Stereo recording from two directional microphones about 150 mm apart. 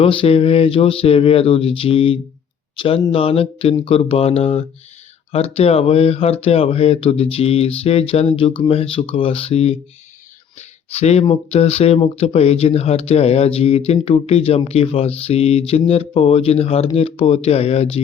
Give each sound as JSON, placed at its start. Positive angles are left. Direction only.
{"t": 0.0, "sound": "speech", "side_deg": 40}